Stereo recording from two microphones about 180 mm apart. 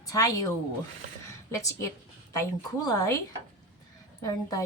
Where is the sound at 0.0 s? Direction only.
20° left (ahead or behind).